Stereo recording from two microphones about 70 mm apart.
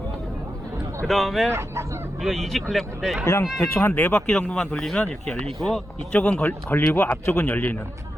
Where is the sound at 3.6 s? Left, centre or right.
Left.